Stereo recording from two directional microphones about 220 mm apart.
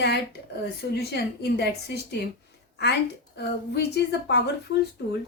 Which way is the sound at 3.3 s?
50° left (ahead or behind).